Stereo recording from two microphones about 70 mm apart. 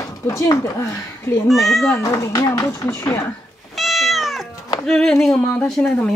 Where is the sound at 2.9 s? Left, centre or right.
Left.